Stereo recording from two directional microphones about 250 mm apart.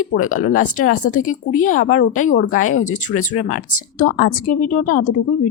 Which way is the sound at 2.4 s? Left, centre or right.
Left.